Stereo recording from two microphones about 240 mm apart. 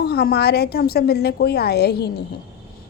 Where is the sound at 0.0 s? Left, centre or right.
Left.